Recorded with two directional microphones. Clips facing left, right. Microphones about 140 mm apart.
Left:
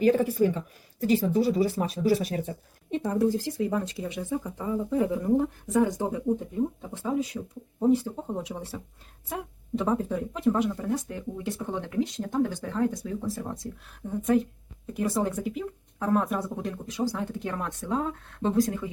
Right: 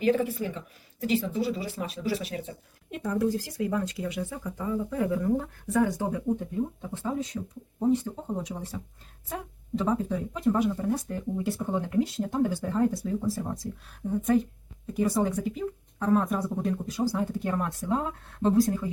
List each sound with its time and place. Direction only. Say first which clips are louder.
0.0 s speech: left 4 dB; 40° left (ahead or behind)
2.9 s speech: left 2 dB; 25° left (ahead or behind); by 17.7 s 5° right (ahead or behind)